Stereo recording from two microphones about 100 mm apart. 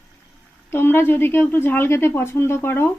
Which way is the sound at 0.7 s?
20° left (ahead or behind).